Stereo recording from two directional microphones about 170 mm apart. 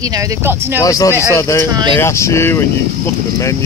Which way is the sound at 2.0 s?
15° left (ahead or behind).